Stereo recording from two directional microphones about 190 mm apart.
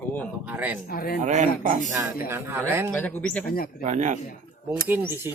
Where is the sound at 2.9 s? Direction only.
10° left (ahead or behind).